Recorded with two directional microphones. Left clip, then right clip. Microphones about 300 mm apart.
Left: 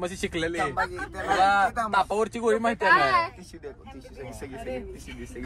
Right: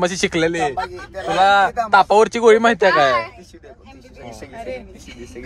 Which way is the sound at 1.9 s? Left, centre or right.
Right.